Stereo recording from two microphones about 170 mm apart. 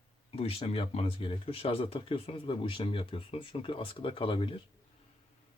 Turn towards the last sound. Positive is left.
turn(degrees=30)  # may be behind; listen again after turning